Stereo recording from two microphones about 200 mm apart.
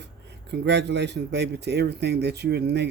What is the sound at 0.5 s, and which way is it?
Speech, 55° right (ahead or behind).